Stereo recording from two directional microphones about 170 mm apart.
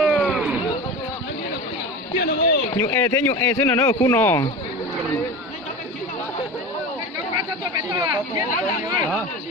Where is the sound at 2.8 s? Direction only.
20° left (ahead or behind).